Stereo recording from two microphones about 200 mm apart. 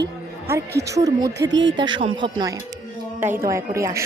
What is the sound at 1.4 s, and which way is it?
Speech, 65° right (ahead or behind).